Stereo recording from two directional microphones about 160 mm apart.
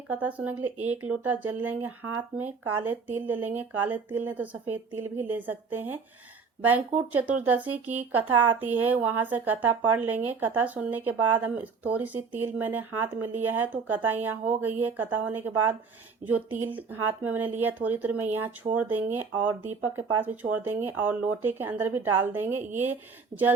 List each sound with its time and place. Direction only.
0.1 s speech: 10° right (ahead or behind)
23.3 s speech: 50° right (ahead or behind)